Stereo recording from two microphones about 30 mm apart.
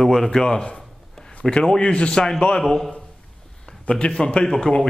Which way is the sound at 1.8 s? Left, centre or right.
Left.